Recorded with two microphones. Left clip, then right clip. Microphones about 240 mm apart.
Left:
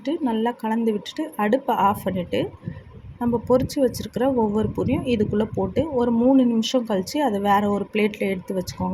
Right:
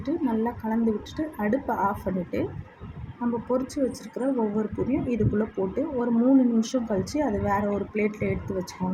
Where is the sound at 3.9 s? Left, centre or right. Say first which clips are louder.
Left 6 dB; left.